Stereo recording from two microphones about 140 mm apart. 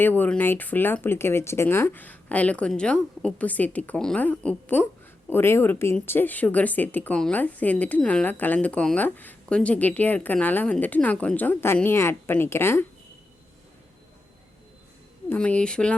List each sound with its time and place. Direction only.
0.0 s a woman's voice: 15° left (ahead or behind)
15.3 s a woman's voice: 10° left (ahead or behind)